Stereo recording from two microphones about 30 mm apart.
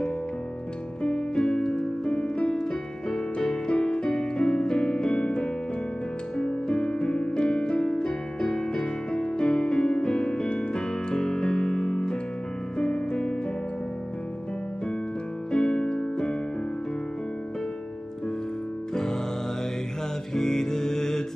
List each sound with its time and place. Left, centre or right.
1.0 s music: left
2.5 s music: left
15.5 s music: left
20.3 s music: centre